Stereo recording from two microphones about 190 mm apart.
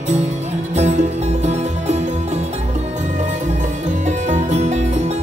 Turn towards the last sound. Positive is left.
turn(degrees=-35)  # may be behind; listen again after turning